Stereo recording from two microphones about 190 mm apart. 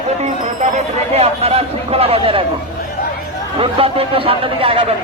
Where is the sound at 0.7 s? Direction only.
30° right (ahead or behind).